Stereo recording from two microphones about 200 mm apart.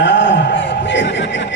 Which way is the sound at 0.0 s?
65° left (ahead or behind).